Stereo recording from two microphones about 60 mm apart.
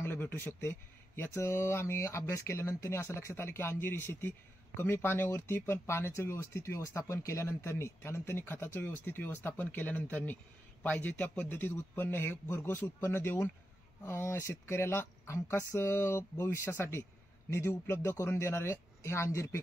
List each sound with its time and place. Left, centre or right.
0.0 s a man's voice: left